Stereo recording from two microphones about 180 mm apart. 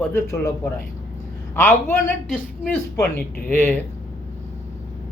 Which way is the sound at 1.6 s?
15° left (ahead or behind).